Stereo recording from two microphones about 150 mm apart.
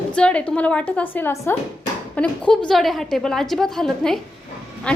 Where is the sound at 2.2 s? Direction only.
5° left (ahead or behind).